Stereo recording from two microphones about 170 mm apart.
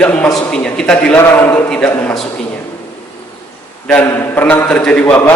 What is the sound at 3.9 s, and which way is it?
A man's voice, 10° left (ahead or behind).